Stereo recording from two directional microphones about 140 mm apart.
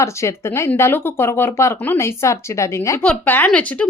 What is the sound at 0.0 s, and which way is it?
Speech, 20° left (ahead or behind).